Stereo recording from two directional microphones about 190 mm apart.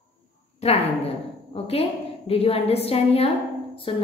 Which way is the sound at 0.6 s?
35° left (ahead or behind).